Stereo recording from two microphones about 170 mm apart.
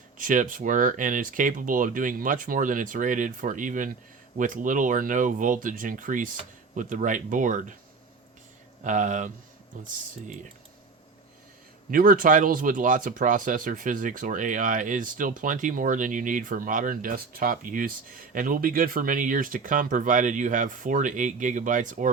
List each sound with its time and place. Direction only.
0.2 s speech: 50° right (ahead or behind)
8.8 s speech: 45° right (ahead or behind)
11.9 s speech: 55° right (ahead or behind)